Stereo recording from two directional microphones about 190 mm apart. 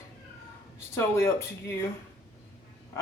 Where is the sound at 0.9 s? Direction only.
15° left (ahead or behind).